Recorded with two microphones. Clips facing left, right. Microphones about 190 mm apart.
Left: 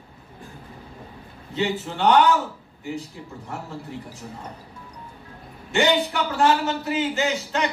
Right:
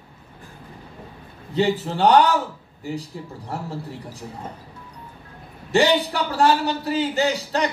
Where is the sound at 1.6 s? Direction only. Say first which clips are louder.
Right 5 dB; 35° right (ahead or behind).